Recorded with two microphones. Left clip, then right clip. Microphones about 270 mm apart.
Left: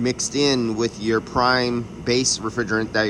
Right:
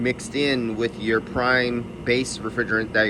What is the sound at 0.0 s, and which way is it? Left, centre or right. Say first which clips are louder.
Speech: left 2 dB; centre.